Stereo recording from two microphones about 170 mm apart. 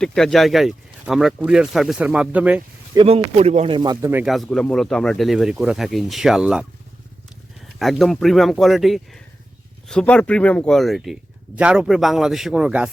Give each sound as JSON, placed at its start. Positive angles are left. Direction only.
{"t": 0.0, "sound": "a man's voice", "side_deg": 5}
{"t": 2.9, "sound": "speech", "side_deg": -35}
{"t": 3.8, "sound": "speech", "side_deg": -25}
{"t": 4.1, "sound": "a man's voice", "side_deg": -5}
{"t": 7.8, "sound": "a man's voice", "side_deg": 0}